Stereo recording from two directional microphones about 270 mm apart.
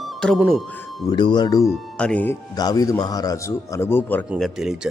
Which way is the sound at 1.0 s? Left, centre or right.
Centre.